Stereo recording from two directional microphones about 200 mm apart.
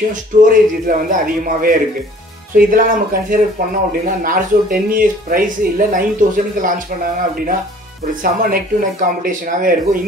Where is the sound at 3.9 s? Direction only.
45° right (ahead or behind).